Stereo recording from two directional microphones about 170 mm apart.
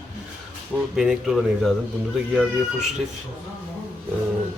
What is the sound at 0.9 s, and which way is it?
Speech, 5° right (ahead or behind).